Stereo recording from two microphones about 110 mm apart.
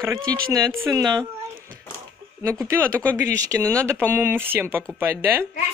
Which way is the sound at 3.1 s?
25° right (ahead or behind).